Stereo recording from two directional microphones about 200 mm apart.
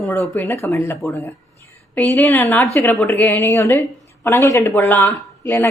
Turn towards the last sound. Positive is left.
turn(degrees=10)  # may be behind; listen again after turning